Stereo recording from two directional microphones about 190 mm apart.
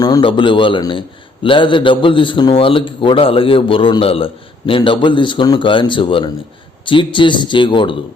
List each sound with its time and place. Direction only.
0.0 s a man's voice: 25° left (ahead or behind)